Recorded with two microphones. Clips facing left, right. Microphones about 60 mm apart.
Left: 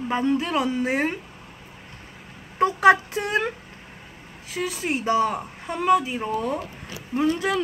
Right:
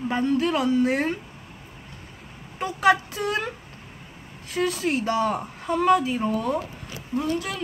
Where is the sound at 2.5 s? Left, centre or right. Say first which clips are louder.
Left 4 dB; left.